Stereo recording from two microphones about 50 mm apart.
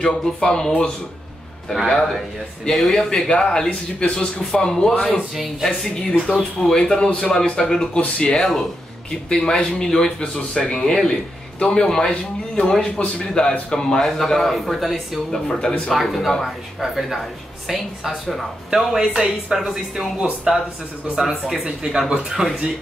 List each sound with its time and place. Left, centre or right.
0.0 s a man's voice: centre
2.7 s a man's voice: centre
5.3 s a woman's voice: centre
5.7 s a man's voice: centre
8.4 s a woman's voice: centre
9.3 s a man's voice: centre